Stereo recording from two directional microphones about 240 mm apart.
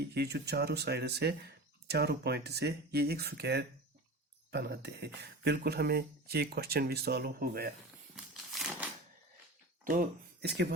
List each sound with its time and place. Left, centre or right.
0.1 s speech: right
8.1 s a sound: centre
9.8 s speech: right